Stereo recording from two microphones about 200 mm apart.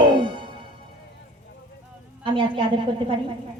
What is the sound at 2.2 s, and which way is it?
Speech, 25° right (ahead or behind).